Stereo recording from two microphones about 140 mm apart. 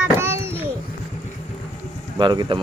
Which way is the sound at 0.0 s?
15° right (ahead or behind).